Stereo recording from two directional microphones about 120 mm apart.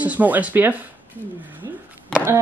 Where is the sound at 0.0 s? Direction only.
15° right (ahead or behind).